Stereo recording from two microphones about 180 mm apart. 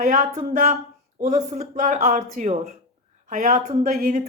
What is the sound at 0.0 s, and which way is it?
A woman's voice, 45° right (ahead or behind).